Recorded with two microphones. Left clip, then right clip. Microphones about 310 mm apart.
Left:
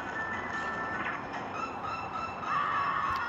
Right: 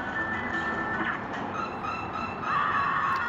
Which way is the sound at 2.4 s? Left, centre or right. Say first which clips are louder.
Right 4 dB; centre.